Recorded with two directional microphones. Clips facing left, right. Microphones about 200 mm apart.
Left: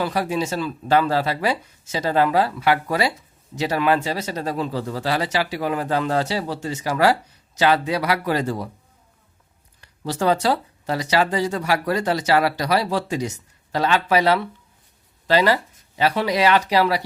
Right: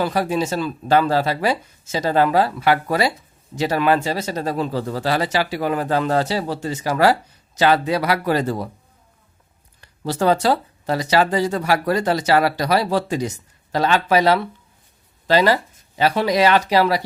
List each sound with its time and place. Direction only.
0.0 s speech: 40° right (ahead or behind)
10.1 s speech: 45° right (ahead or behind)
13.7 s speech: 40° right (ahead or behind)